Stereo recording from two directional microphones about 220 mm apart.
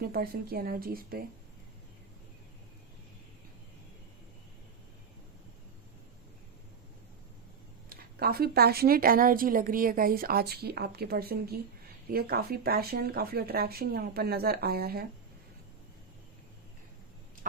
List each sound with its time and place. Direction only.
0.0 s a woman's voice: 45° right (ahead or behind)
7.9 s a woman's voice: 45° right (ahead or behind)